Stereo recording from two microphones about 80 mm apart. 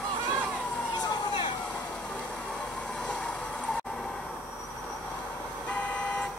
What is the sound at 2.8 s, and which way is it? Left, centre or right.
Vehicle, centre.